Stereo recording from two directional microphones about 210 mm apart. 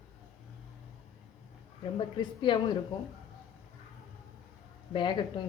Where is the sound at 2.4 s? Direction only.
20° left (ahead or behind).